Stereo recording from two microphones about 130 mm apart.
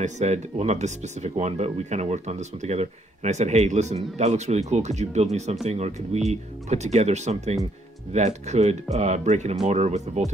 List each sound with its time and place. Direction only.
0.0 s speech: 60° right (ahead or behind)